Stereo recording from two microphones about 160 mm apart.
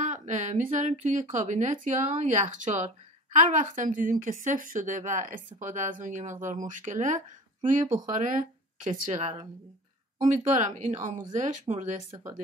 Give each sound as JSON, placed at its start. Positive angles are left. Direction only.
{"t": 0.0, "sound": "a woman's voice", "side_deg": -50}
{"t": 11.7, "sound": "speech", "side_deg": -30}